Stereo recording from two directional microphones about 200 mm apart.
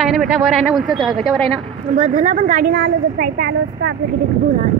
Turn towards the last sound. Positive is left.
turn(degrees=-55)  # may be behind; listen again after turning